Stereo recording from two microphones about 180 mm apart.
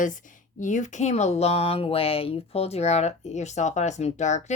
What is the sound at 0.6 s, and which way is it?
Speech, 45° left (ahead or behind).